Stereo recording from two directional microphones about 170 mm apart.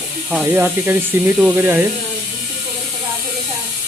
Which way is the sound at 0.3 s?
10° right (ahead or behind).